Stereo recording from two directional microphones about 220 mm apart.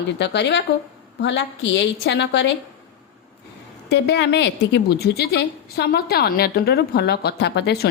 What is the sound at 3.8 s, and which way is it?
A woman's voice, 50° left (ahead or behind).